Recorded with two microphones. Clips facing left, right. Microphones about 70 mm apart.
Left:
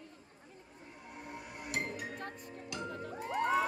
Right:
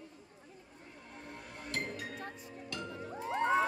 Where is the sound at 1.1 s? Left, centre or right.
Centre.